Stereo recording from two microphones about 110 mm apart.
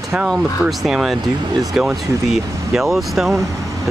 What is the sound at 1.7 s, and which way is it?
Speech, centre (ahead or behind).